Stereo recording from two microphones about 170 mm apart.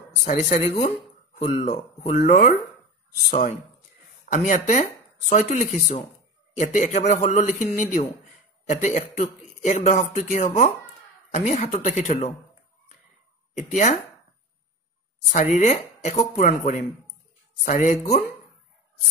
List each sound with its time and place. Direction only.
0.2 s speech: 45° left (ahead or behind)
13.7 s speech: 40° left (ahead or behind)
15.5 s speech: 40° left (ahead or behind)